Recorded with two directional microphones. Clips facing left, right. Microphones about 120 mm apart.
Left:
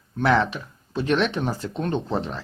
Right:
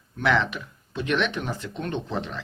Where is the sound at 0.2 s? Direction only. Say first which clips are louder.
Left 3 dB; 35° left (ahead or behind).